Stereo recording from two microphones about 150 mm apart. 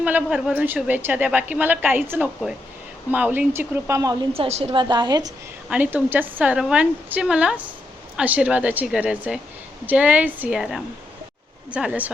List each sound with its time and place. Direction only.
0.0 s a woman's voice: 10° right (ahead or behind); by 4.3 s 25° right (ahead or behind)
4.4 s a woman's voice: 40° right (ahead or behind)
5.6 s a woman's voice: 10° right (ahead or behind)